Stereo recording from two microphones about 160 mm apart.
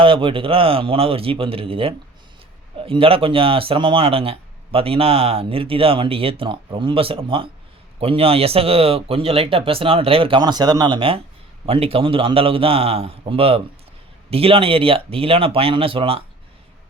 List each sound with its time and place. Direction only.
0.0 s speech: 35° right (ahead or behind)